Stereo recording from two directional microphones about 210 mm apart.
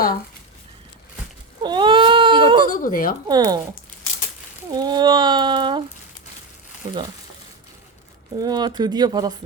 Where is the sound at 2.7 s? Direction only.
40° left (ahead or behind).